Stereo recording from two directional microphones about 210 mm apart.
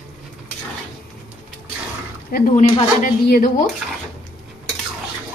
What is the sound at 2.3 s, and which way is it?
A woman's voice, 35° left (ahead or behind).